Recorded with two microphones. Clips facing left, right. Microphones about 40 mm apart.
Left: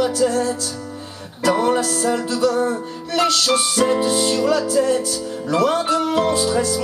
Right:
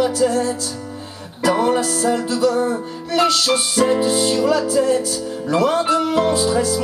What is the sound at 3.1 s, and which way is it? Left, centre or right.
Music, centre.